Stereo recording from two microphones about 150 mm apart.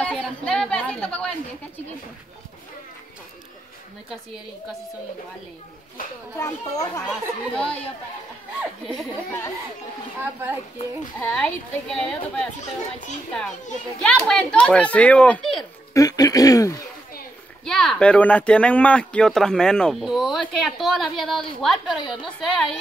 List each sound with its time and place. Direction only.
0.0 s a sound: 5° left (ahead or behind)
6.3 s speech: 20° left (ahead or behind)
7.1 s a child's voice: 5° left (ahead or behind)
11.1 s speech: 5° left (ahead or behind)
14.0 s a child's voice: 5° left (ahead or behind)
15.9 s speech: 25° left (ahead or behind)
17.6 s speech: 5° left (ahead or behind)